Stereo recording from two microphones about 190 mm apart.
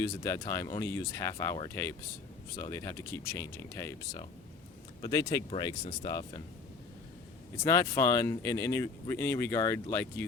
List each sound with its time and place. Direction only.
0.0 s speech: 15° left (ahead or behind)
5.0 s speech: 20° left (ahead or behind)
7.6 s speech: 15° left (ahead or behind)